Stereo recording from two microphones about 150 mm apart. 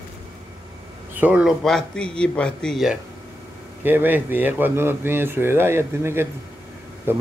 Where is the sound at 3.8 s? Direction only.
15° right (ahead or behind).